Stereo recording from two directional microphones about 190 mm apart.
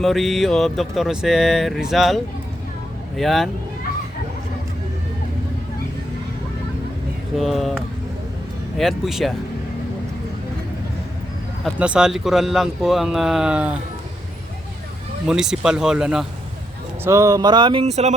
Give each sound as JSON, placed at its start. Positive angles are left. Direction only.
{"t": 0.0, "sound": "speech", "side_deg": 0}
{"t": 7.3, "sound": "speech", "side_deg": 0}
{"t": 11.6, "sound": "speech", "side_deg": -5}
{"t": 15.3, "sound": "speech", "side_deg": -5}
{"t": 17.0, "sound": "speech", "side_deg": -15}